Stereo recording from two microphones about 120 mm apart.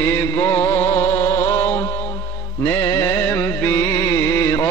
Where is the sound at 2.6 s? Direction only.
20° left (ahead or behind).